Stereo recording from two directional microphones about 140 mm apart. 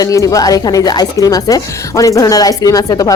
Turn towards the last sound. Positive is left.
turn(degrees=25)  # may be behind; listen again after turning